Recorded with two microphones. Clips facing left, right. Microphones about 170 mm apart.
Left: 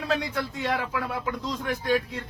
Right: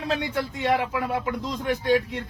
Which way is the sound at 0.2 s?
20° right (ahead or behind).